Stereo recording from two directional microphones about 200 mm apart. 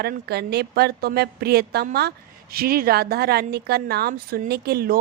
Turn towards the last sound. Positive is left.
turn(degrees=-50)  # may be behind; listen again after turning